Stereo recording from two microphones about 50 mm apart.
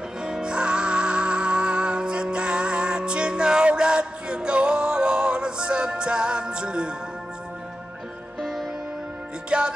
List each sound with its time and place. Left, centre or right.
0.2 s music: centre
8.4 s music: centre
9.5 s music: centre